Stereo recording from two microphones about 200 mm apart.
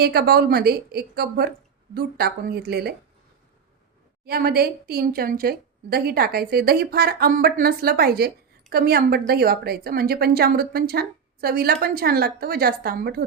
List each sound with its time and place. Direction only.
0.0 s a woman's voice: 50° right (ahead or behind)
4.3 s a woman's voice: 50° right (ahead or behind)